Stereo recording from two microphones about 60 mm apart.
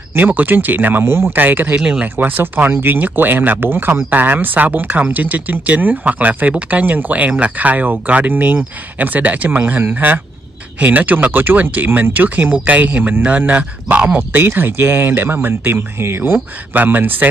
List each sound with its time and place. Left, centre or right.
0.1 s speech: right
1.8 s speech: centre
2.1 s speech: right